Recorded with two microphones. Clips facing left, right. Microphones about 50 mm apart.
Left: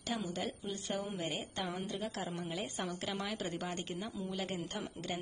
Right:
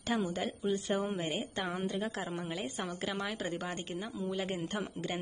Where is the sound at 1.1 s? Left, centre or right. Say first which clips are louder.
Right 4 dB; right; by 4.5 s centre.